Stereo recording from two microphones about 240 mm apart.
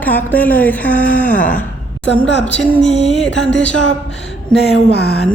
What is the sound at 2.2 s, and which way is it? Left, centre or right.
Mantra, left.